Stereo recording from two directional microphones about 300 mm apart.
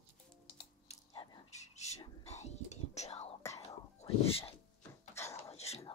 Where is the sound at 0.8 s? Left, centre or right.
Centre.